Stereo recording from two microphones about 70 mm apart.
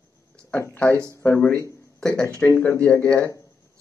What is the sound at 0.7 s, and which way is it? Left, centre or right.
Speech, left.